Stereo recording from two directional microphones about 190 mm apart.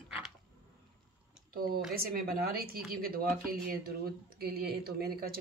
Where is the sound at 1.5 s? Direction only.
50° right (ahead or behind).